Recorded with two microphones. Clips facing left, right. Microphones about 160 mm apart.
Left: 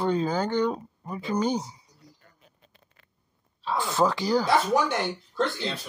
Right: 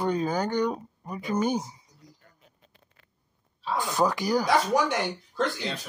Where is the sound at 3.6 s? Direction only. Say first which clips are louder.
Left 1 dB; 20° right (ahead or behind).